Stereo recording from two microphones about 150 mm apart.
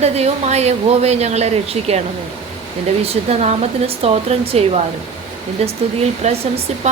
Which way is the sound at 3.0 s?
45° right (ahead or behind).